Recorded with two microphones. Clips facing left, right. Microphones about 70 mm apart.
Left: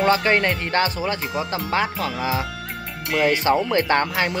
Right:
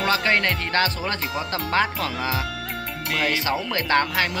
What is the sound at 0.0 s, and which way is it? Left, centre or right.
Speech, left.